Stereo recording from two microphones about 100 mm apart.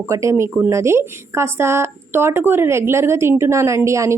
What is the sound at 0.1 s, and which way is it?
A woman's voice, 30° right (ahead or behind).